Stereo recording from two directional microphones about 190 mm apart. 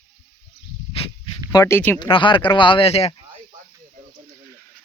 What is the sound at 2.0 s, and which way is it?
Speech, 25° left (ahead or behind).